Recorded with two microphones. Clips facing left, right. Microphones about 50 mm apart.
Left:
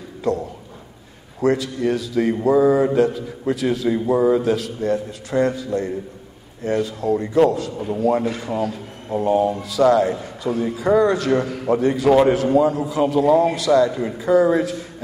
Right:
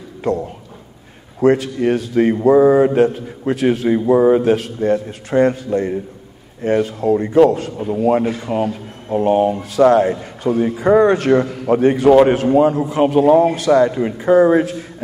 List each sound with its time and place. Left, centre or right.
0.2 s a man's voice: right
4.0 s a man's voice: right
4.3 s a man's voice: right
8.5 s a man's voice: right
10.4 s a man's voice: right